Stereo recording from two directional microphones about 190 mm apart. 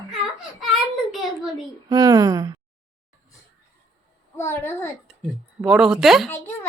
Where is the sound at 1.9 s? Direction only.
20° right (ahead or behind).